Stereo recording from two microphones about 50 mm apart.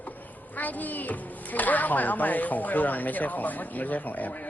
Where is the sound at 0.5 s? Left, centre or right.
Left.